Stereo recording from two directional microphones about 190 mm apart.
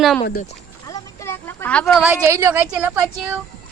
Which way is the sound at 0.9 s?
15° left (ahead or behind).